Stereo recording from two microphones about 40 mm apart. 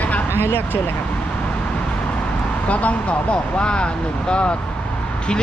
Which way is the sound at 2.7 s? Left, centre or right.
Left.